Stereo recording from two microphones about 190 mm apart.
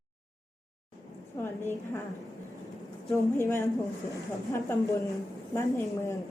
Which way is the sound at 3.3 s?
15° left (ahead or behind).